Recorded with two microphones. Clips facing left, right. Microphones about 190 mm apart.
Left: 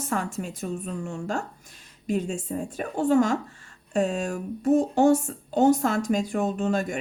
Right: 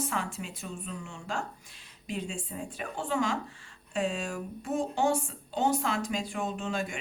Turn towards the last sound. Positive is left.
turn(degrees=45)  # may be behind; listen again after turning